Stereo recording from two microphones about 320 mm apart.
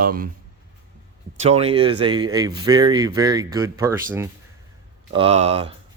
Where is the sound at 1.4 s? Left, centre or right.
Centre.